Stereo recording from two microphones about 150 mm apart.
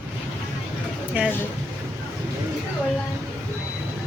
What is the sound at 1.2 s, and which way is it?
Speech, 10° right (ahead or behind).